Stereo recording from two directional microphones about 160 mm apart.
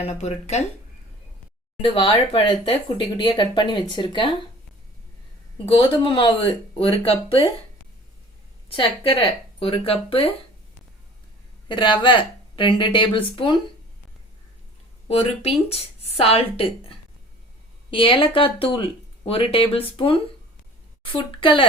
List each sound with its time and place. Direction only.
0.0 s speech: 45° left (ahead or behind)
2.0 s speech: 35° left (ahead or behind)
5.6 s speech: 35° left (ahead or behind)
8.7 s speech: 35° left (ahead or behind)
11.7 s speech: 30° left (ahead or behind)
15.0 s speech: 40° left (ahead or behind)
17.9 s speech: 35° left (ahead or behind)